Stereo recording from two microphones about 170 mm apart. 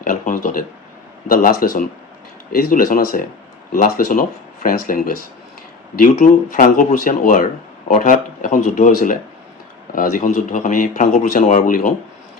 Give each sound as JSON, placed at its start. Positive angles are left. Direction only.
{"t": 0.0, "sound": "speech", "side_deg": 50}